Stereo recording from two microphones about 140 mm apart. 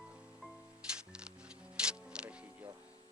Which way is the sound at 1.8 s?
5° right (ahead or behind).